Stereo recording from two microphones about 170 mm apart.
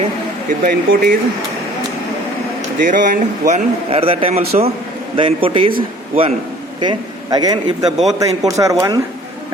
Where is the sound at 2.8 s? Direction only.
50° right (ahead or behind); by 5.7 s 30° right (ahead or behind).